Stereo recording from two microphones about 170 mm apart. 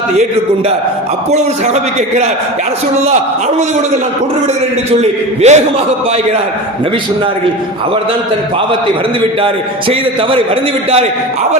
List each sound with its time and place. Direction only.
1.3 s a man's voice: 40° right (ahead or behind)
4.9 s a man's voice: 40° right (ahead or behind)
9.9 s a man's voice: 35° right (ahead or behind)